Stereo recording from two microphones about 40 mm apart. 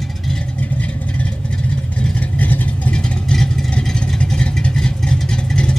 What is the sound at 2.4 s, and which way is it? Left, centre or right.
Vehicle, left.